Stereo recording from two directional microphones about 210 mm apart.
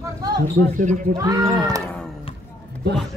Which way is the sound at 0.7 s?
35° right (ahead or behind).